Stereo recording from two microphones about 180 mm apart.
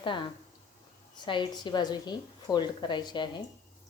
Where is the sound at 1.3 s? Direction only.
25° left (ahead or behind).